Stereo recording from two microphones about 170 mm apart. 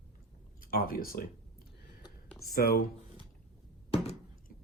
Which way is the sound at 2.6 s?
65° left (ahead or behind).